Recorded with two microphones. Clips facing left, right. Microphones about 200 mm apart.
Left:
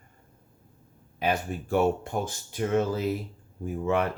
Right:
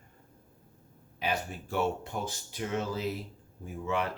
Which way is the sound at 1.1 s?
50° left (ahead or behind).